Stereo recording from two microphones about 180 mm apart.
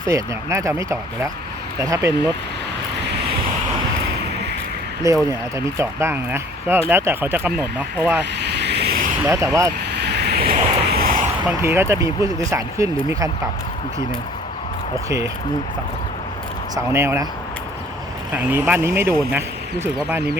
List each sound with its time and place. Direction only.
0.1 s speech: 15° right (ahead or behind)
5.0 s speech: 15° right (ahead or behind)
8.2 s vehicle: 70° right (ahead or behind)
9.2 s speech: 15° right (ahead or behind)
9.9 s vehicle: 70° right (ahead or behind)
11.4 s speech: 15° right (ahead or behind)
16.7 s speech: 15° right (ahead or behind)
18.5 s speech: 10° right (ahead or behind)